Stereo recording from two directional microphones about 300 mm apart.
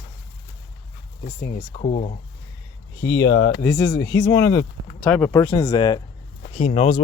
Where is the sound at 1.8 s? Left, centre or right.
Left.